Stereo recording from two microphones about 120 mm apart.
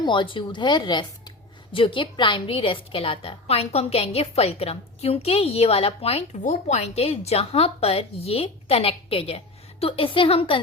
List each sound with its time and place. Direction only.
0.0 s a woman's voice: 40° left (ahead or behind)